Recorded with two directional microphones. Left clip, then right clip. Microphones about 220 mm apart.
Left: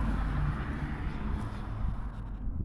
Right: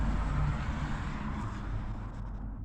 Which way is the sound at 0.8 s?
50° right (ahead or behind).